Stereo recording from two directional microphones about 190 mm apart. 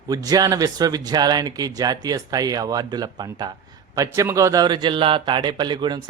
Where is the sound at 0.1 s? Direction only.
20° right (ahead or behind).